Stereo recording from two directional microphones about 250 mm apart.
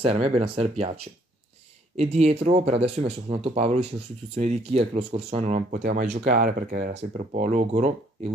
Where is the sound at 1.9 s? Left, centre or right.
Right.